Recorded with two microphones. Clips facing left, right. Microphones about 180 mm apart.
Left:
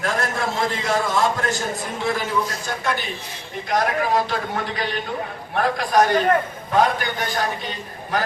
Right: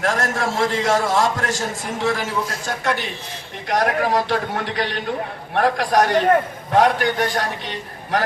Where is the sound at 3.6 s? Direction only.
75° right (ahead or behind).